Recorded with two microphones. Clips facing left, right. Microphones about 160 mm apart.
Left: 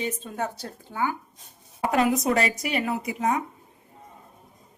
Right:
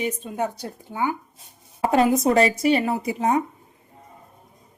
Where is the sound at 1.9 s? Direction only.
30° right (ahead or behind).